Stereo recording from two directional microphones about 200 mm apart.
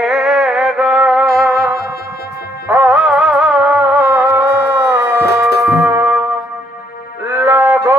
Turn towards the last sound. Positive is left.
turn(degrees=-10)  # may be behind; listen again after turning